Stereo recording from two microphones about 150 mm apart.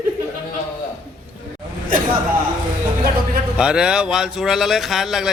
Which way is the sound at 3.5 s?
5° right (ahead or behind).